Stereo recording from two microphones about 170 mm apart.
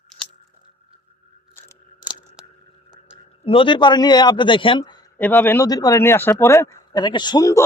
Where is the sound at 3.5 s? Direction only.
30° left (ahead or behind).